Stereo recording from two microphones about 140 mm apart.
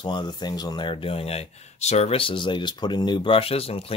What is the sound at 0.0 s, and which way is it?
Speech, 30° left (ahead or behind).